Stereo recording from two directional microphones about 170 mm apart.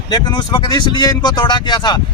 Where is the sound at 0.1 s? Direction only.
25° left (ahead or behind).